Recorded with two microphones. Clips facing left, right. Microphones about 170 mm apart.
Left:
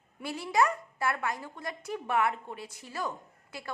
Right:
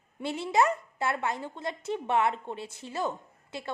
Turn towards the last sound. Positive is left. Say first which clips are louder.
# right 4 dB
turn(degrees=-25)  # may be behind; listen again after turning